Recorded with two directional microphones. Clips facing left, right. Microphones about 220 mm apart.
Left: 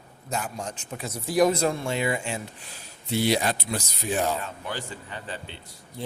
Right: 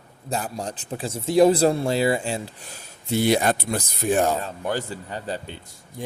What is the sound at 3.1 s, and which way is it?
Speech, 50° right (ahead or behind).